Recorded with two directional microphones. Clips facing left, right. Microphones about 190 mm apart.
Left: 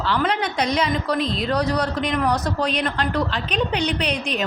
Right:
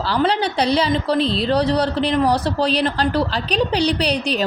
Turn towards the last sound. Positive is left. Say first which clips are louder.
# right 4 dB
turn(degrees=-35)  # may be behind; listen again after turning